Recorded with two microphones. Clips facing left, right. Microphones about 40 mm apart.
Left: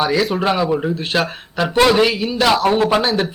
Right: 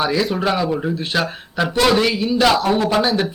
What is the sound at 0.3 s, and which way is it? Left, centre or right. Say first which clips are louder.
Speech: left 2 dB; centre.